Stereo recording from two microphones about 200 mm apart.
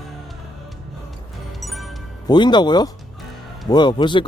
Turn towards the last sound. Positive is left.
turn(degrees=20)  # may be behind; listen again after turning